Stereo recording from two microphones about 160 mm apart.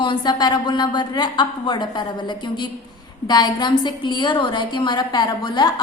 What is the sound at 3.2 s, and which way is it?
A woman's voice, 25° left (ahead or behind).